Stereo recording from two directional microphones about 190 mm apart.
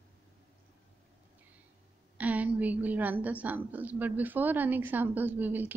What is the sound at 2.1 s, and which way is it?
A woman's voice, 10° right (ahead or behind).